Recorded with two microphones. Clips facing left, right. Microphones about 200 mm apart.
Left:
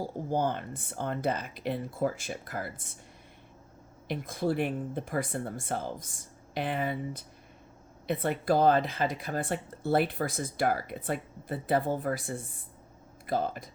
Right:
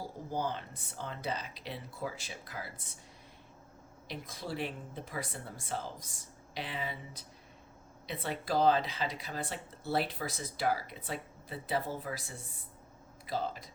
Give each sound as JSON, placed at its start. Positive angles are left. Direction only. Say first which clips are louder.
{"t": 0.3, "sound": "speech", "louder": "left 6 dB", "side_deg": 55}
{"t": 4.1, "sound": "speech", "louder": "left 10 dB", "side_deg": 55}